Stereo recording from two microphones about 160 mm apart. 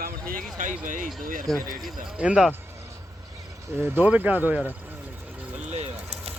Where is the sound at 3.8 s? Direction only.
15° right (ahead or behind).